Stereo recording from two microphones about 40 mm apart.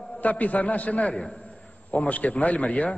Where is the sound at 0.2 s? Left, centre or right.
Left.